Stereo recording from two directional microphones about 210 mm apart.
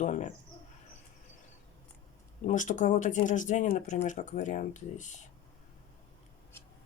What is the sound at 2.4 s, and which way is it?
Speech, 35° left (ahead or behind).